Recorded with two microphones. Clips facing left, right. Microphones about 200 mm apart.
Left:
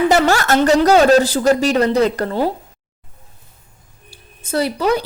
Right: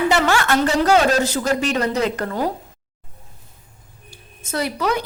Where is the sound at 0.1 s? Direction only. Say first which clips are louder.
Left 4 dB; 40° left (ahead or behind).